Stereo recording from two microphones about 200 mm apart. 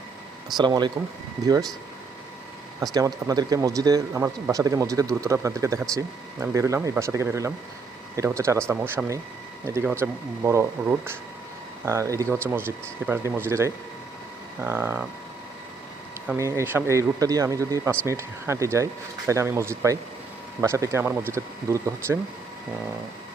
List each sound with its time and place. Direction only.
0.5 s speech: 20° right (ahead or behind)
2.9 s speech: 20° right (ahead or behind)
16.2 s speech: 10° right (ahead or behind)